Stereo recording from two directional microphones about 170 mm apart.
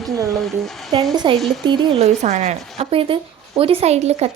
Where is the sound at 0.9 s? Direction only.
35° right (ahead or behind).